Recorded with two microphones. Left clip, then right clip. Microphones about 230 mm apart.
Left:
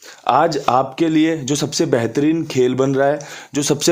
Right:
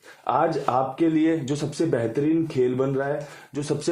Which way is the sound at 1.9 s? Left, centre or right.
Left.